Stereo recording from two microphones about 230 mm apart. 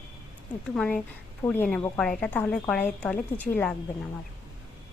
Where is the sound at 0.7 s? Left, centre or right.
Centre.